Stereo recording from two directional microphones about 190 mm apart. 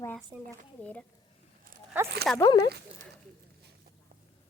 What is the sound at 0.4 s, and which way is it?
Speech, 5° left (ahead or behind).